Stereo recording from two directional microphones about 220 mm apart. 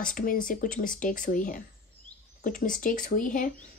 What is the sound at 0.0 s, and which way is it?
Speech, 40° left (ahead or behind).